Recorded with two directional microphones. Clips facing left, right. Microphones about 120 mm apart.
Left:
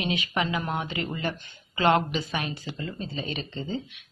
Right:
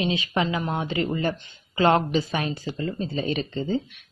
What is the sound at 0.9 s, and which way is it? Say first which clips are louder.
A woman's voice: right 6 dB; 35° right (ahead or behind).